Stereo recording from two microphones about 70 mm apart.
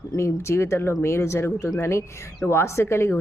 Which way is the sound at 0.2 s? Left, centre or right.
Left.